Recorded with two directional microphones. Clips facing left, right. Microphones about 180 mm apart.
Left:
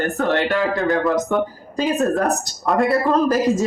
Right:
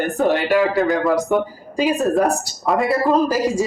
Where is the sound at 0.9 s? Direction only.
Centre (ahead or behind).